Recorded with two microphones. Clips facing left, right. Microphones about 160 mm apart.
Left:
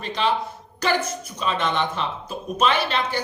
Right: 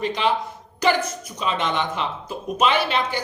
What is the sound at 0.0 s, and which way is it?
A woman's voice, 15° right (ahead or behind).